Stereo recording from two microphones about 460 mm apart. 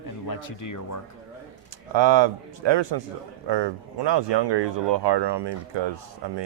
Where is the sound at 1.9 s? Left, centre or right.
Right.